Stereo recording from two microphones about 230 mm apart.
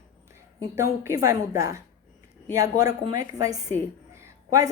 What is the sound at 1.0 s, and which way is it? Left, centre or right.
A woman's voice, centre.